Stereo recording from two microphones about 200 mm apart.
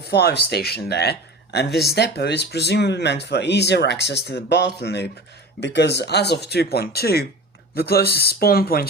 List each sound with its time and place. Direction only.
0.1 s speech: 55° left (ahead or behind)